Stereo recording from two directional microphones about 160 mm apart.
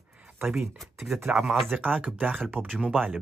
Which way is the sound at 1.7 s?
10° right (ahead or behind).